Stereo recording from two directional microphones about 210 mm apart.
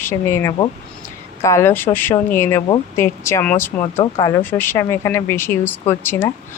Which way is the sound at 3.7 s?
30° left (ahead or behind).